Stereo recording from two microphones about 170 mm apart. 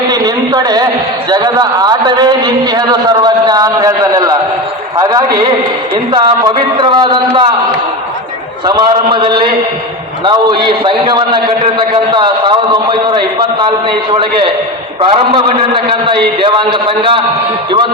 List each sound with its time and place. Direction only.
0.1 s a man's voice: 25° right (ahead or behind)
8.6 s a man's voice: 30° right (ahead or behind)